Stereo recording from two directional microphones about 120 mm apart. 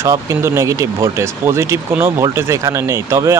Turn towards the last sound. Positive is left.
turn(degrees=-25)  # may be behind; listen again after turning